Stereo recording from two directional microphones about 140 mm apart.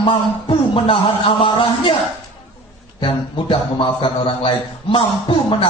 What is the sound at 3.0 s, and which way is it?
A man's voice, 35° left (ahead or behind).